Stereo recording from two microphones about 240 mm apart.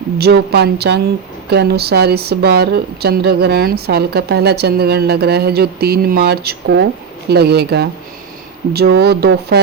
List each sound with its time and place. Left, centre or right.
0.2 s a woman's voice: right